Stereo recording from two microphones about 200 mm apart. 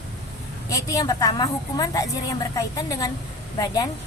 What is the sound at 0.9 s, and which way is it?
A woman's voice, 20° left (ahead or behind).